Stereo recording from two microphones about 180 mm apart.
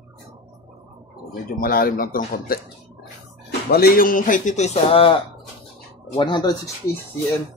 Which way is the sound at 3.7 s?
55° left (ahead or behind).